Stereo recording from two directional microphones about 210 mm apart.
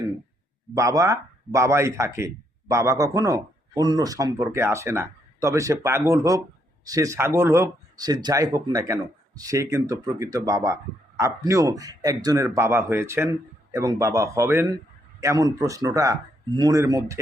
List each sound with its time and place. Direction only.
0.7 s a man's voice: 15° right (ahead or behind)